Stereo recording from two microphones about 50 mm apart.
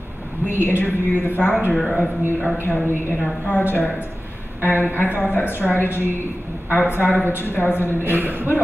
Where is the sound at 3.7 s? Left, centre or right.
Left.